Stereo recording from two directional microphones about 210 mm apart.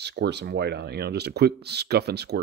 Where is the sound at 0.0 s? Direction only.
55° right (ahead or behind).